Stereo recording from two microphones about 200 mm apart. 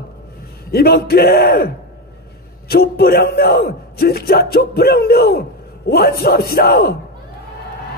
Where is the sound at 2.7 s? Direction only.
50° left (ahead or behind).